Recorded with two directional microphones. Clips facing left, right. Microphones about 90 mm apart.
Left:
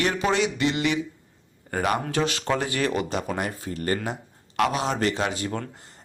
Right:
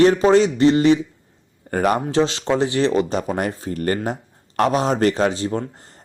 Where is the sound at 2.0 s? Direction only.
25° right (ahead or behind).